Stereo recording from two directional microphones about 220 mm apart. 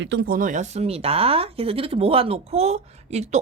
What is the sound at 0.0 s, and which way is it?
Speech, 50° right (ahead or behind).